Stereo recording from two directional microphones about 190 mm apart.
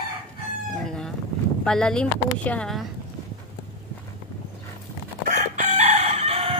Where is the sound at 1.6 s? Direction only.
5° left (ahead or behind).